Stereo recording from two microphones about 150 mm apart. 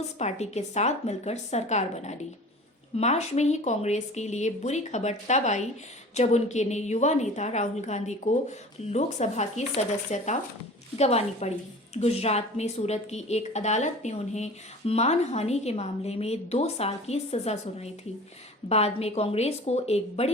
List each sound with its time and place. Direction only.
0.2 s a woman's voice: 50° left (ahead or behind)